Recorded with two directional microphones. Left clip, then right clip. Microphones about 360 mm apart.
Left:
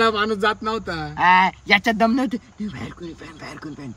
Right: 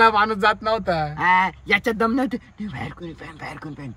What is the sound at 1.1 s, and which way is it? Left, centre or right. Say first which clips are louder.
Speech: left 5 dB; centre.